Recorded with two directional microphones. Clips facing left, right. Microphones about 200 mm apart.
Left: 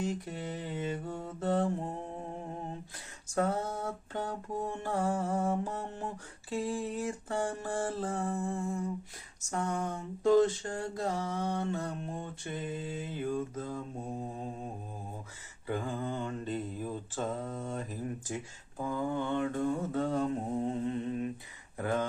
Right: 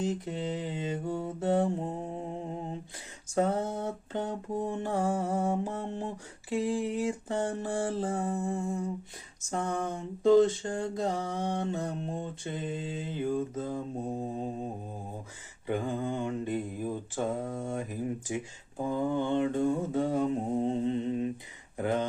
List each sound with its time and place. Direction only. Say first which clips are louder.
0.0 s mantra: right 4 dB; 20° right (ahead or behind)
15.6 s mantra: right 4 dB; 20° right (ahead or behind)
20.6 s mantra: right 4 dB; 25° right (ahead or behind)
21.8 s speech: right 3 dB; 20° right (ahead or behind)